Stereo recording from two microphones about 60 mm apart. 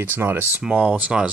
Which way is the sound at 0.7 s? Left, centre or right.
Right.